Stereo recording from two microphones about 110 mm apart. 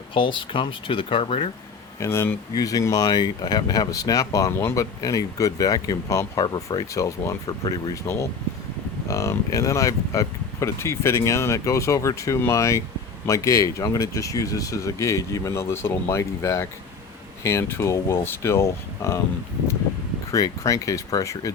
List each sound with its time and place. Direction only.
0.1 s speech: 50° left (ahead or behind)
2.0 s speech: 20° left (ahead or behind)
2.6 s speech: 35° left (ahead or behind)
20.3 s speech: 30° left (ahead or behind)